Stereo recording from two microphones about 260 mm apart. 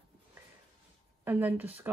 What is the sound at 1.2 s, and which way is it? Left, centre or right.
Speech, centre.